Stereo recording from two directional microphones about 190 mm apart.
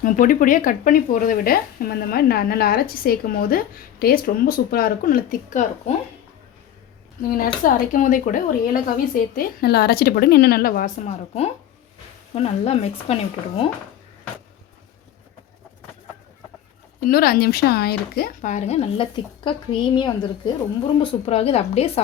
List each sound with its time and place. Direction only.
0.0 s a woman's voice: 45° left (ahead or behind)
7.3 s a woman's voice: 50° left (ahead or behind)
17.0 s a woman's voice: 50° left (ahead or behind); by 22.0 s 30° left (ahead or behind)